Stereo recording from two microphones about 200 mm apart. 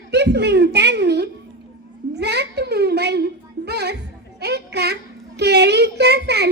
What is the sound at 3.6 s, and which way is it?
Music, 55° right (ahead or behind).